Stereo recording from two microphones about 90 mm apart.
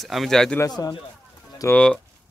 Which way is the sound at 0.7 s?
45° left (ahead or behind).